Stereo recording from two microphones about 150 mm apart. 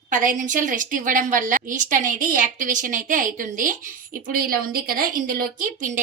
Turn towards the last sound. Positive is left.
turn(degrees=-65)  # may be behind; listen again after turning